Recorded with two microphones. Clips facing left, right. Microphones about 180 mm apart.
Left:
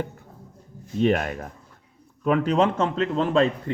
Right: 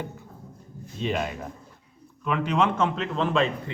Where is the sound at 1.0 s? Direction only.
55° left (ahead or behind).